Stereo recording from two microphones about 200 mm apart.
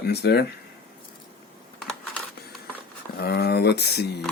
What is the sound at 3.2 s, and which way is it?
Speech, 55° left (ahead or behind).